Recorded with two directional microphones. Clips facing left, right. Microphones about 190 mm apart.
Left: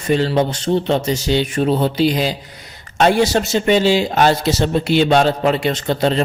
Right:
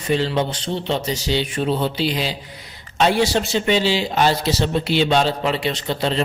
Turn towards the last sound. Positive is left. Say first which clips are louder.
# left 5 dB
turn(degrees=50)  # may be behind; listen again after turning